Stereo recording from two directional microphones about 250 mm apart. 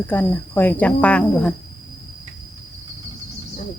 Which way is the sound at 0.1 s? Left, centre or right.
Centre.